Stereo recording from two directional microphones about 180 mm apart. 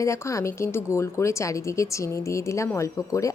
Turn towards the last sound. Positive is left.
turn(degrees=15)  # may be behind; listen again after turning